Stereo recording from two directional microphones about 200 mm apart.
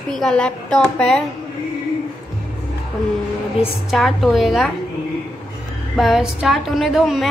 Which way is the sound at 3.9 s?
Centre (ahead or behind).